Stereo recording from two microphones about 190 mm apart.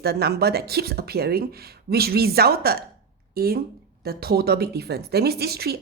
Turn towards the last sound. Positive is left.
turn(degrees=-55)  # may be behind; listen again after turning